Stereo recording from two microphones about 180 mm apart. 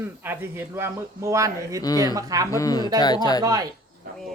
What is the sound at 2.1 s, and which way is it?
Speech, 20° right (ahead or behind).